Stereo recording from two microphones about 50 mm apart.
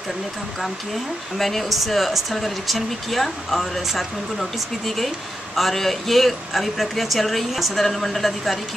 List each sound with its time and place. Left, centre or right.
1.4 s speech: centre